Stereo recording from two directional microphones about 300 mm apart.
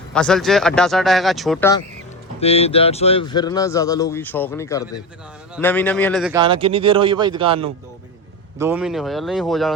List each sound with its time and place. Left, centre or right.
0.1 s speech: centre
2.4 s speech: centre
6.3 s speech: centre
8.5 s speech: centre